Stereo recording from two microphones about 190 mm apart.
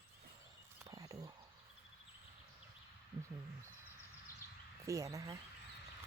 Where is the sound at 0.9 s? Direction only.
20° right (ahead or behind).